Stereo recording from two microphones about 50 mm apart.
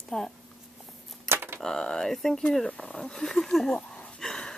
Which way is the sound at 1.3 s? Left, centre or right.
Right.